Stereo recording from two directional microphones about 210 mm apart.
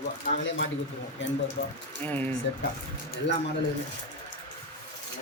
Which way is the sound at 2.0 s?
10° left (ahead or behind).